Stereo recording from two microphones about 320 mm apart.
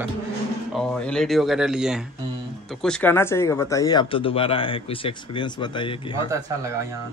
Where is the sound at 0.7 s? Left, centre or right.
Centre.